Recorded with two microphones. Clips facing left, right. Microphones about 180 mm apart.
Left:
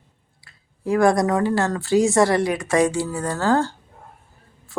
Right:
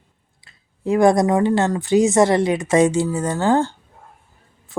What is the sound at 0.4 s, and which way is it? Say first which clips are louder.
Speech: right 3 dB; 20° right (ahead or behind).